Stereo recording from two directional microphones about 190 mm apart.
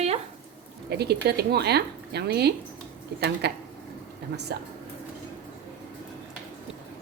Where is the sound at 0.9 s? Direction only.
60° right (ahead or behind).